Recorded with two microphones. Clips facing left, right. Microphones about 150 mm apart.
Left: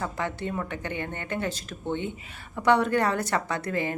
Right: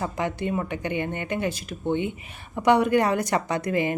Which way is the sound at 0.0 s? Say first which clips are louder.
Right 3 dB; 15° right (ahead or behind).